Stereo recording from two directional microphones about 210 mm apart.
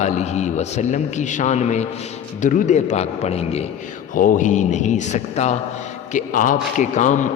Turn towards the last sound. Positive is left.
turn(degrees=35)  # may be behind; listen again after turning